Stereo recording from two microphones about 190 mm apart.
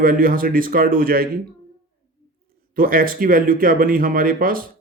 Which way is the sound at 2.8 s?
50° right (ahead or behind).